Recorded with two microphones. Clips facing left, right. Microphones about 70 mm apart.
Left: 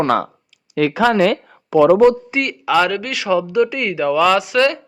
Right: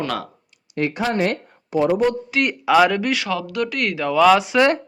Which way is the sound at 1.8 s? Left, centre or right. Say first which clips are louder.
Left 8 dB; left.